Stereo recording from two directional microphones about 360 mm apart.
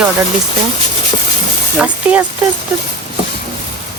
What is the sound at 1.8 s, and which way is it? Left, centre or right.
Speech, centre.